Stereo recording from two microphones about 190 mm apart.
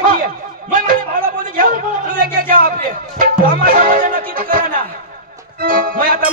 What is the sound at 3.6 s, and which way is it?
Music, 50° right (ahead or behind).